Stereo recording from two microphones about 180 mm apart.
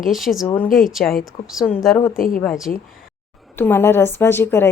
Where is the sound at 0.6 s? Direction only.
50° left (ahead or behind).